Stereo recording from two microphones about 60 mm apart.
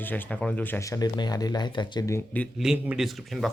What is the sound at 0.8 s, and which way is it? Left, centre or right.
Speech, left.